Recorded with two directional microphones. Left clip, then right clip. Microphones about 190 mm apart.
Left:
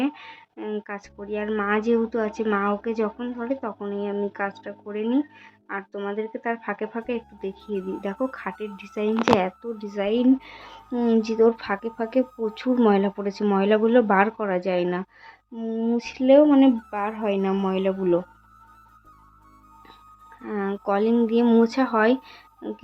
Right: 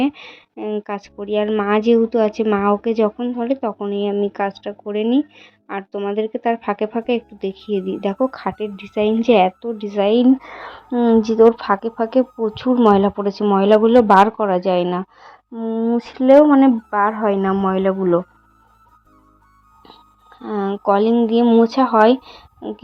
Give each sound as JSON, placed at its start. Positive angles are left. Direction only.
{"t": 0.0, "sound": "speech", "side_deg": -25}
{"t": 7.6, "sound": "speech", "side_deg": 0}
{"t": 8.0, "sound": "a woman's voice", "side_deg": -20}
{"t": 20.4, "sound": "a woman's voice", "side_deg": -10}